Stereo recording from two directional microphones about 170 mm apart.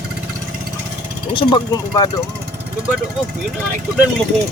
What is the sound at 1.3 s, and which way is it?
Speech, 30° left (ahead or behind).